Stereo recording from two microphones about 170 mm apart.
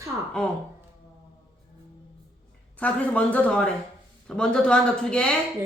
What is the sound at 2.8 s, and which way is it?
Speech, 10° left (ahead or behind).